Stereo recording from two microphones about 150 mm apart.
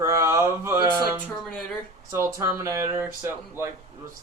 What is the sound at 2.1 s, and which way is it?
Speech, 20° right (ahead or behind).